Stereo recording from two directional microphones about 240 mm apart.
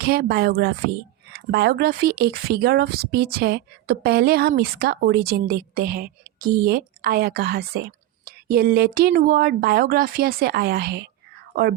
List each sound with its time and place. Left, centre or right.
0.0 s speech: right